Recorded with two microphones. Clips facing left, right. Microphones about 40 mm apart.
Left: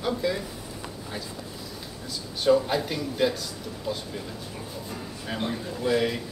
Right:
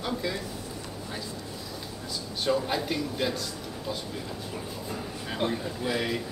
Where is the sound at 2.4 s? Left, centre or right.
Centre.